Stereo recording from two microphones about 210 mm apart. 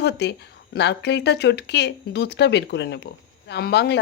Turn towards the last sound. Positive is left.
turn(degrees=50)  # may be behind; listen again after turning